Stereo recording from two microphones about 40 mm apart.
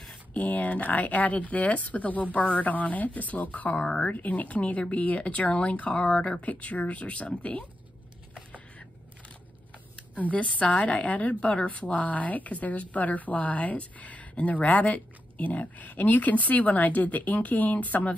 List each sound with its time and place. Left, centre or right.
0.3 s a woman's voice: left
3.8 s speech: left
4.1 s a woman's voice: left
10.1 s a woman's voice: left